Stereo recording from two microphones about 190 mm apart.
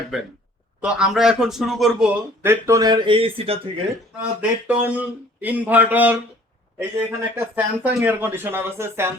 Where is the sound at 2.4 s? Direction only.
15° right (ahead or behind); by 3.6 s 30° right (ahead or behind).